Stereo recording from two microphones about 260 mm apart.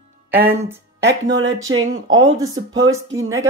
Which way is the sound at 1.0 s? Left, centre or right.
Right.